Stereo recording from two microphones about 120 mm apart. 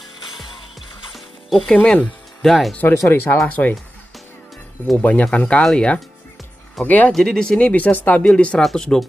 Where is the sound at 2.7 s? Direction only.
15° left (ahead or behind).